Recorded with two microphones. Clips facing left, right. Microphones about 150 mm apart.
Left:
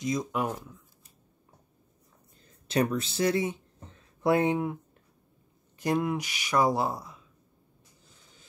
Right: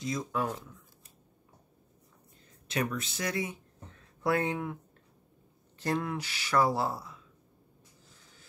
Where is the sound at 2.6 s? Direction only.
35° left (ahead or behind).